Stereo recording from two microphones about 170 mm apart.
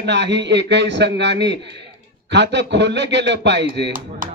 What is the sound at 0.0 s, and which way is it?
A man's voice, 90° right.